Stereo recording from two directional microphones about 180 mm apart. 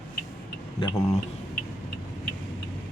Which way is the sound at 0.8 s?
20° left (ahead or behind).